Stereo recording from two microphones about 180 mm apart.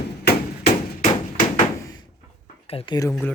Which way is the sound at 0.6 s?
45° left (ahead or behind).